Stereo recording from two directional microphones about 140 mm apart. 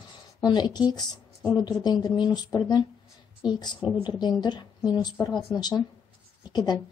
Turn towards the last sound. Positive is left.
turn(degrees=30)  # may be behind; listen again after turning